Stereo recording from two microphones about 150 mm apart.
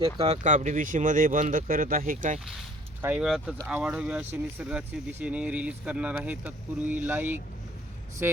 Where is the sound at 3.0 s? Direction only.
15° right (ahead or behind).